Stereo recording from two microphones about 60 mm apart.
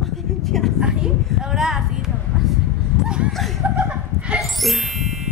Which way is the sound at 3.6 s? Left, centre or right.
Right.